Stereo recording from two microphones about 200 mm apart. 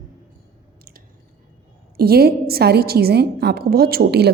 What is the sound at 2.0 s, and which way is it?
A woman's voice, 50° right (ahead or behind).